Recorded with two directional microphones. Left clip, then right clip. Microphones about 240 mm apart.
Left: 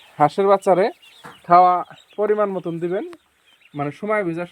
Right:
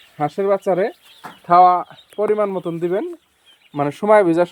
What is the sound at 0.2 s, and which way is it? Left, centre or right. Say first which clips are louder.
A man's voice: left 3 dB; centre.